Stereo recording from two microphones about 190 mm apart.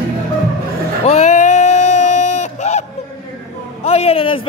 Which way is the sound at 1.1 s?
35° left (ahead or behind).